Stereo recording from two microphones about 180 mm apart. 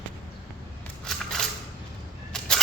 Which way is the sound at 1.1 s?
5° left (ahead or behind).